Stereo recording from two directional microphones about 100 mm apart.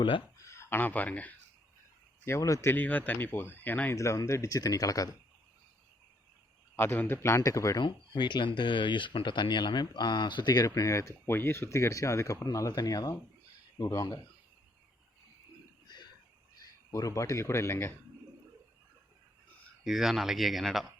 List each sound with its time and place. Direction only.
0.3 s a sound: 30° left (ahead or behind); by 1.3 s 15° left (ahead or behind)
2.2 s a man's voice: 30° left (ahead or behind)
2.7 s speech: 15° left (ahead or behind)
3.9 s speech: 30° left (ahead or behind)
6.7 s a man's voice: 20° left (ahead or behind)
7.8 s speech: 50° left (ahead or behind)
16.9 s a man's voice: 35° left (ahead or behind)
19.8 s speech: 5° right (ahead or behind)